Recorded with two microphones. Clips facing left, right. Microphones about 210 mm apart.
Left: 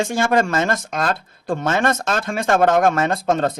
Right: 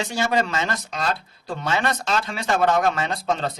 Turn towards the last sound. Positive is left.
turn(degrees=50)  # may be behind; listen again after turning